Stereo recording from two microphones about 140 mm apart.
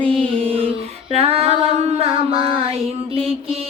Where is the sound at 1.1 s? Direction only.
45° right (ahead or behind).